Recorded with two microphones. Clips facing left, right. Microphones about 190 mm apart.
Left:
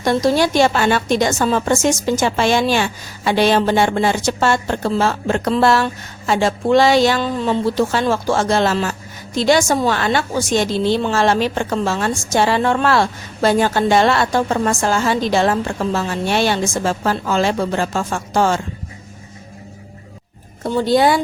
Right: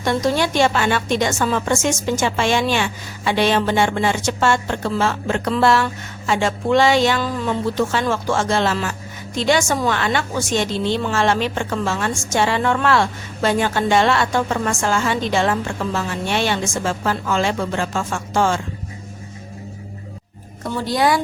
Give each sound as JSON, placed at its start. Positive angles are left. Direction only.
{"t": 0.0, "sound": "speech", "side_deg": 40}
{"t": 20.8, "sound": "speech", "side_deg": 25}